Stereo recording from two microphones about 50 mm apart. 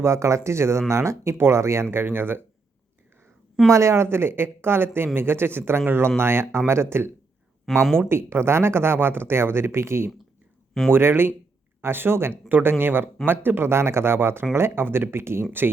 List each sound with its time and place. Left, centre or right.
0.0 s speech: right
3.7 s speech: right
10.9 s speech: right
12.5 s speech: right